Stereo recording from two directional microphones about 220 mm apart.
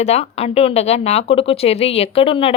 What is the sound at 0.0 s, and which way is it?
A woman's voice, 30° left (ahead or behind).